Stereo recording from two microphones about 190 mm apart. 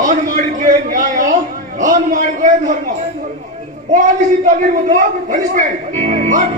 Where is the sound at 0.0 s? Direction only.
40° right (ahead or behind).